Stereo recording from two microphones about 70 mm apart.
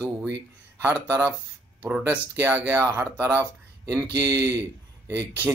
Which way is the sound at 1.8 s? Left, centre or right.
Right.